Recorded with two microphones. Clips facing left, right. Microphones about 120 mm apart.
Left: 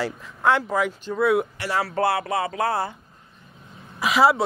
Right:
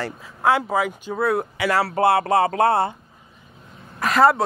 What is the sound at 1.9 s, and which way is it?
Speech, 25° right (ahead or behind).